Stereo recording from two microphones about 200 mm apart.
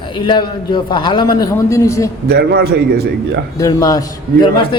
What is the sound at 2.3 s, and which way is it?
Speech, 55° right (ahead or behind).